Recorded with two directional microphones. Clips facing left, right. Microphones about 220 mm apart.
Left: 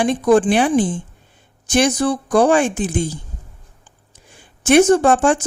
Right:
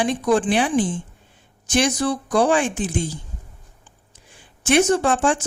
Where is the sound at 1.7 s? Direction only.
50° left (ahead or behind).